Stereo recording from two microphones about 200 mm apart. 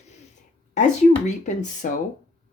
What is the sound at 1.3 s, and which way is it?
Speech, 40° left (ahead or behind).